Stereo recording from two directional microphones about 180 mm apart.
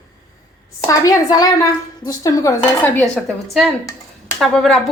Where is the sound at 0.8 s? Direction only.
20° left (ahead or behind).